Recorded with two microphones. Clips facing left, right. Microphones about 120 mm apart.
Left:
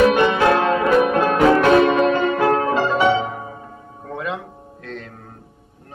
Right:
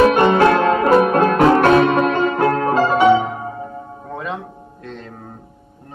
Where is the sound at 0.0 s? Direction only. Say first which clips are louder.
Right 3 dB; 45° right (ahead or behind).